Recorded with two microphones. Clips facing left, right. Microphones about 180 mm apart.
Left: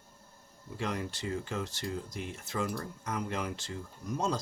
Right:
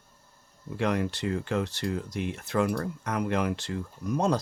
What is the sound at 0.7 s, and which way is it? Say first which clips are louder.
Speech: right 8 dB; 65° right (ahead or behind).